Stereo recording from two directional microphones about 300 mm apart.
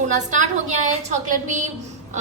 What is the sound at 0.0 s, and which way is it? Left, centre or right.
Speech, right.